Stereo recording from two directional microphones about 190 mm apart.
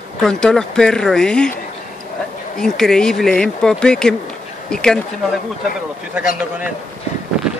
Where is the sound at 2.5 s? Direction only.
5° left (ahead or behind).